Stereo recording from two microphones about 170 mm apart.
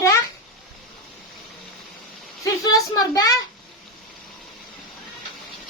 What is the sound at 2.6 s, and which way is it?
Speech, 20° left (ahead or behind).